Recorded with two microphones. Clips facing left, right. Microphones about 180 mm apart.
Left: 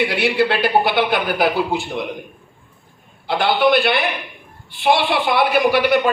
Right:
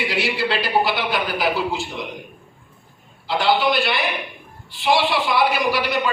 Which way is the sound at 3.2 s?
55° left (ahead or behind).